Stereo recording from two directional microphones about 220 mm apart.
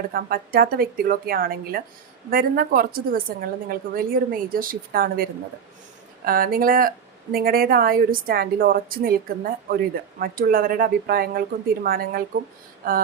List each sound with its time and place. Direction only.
0.1 s speech: 40° right (ahead or behind)